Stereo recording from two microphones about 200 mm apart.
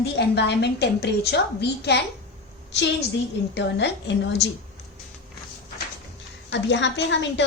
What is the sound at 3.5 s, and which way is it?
Speech, 60° left (ahead or behind).